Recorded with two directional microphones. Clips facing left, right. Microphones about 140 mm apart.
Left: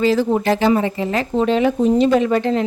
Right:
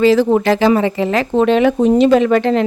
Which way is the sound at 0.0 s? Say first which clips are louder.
Right 5 dB; 80° right.